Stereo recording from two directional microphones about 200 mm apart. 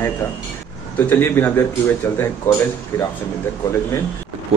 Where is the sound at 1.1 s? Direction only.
10° left (ahead or behind).